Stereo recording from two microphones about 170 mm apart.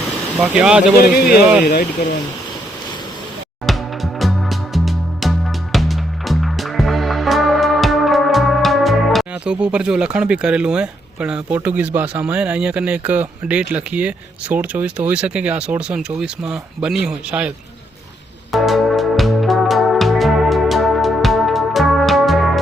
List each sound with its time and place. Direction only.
0.3 s speech: 5° right (ahead or behind)
0.9 s speech: 60° left (ahead or behind)
3.7 s music: centre (ahead or behind)
18.5 s music: centre (ahead or behind)